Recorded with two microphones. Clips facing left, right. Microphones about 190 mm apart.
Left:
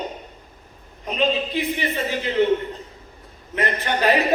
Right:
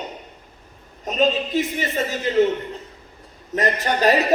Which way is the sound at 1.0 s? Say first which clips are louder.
Right 2 dB; 45° right (ahead or behind).